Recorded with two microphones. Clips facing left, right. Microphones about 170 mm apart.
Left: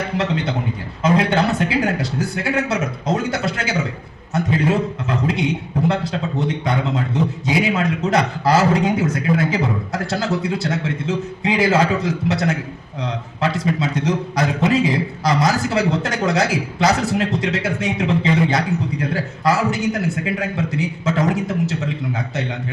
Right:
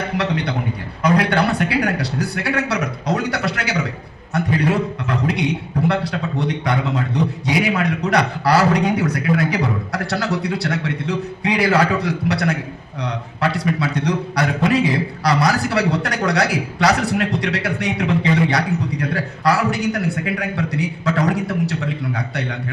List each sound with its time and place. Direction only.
0.2 s a man's voice: 25° left (ahead or behind)
7.4 s a man's voice: 25° left (ahead or behind)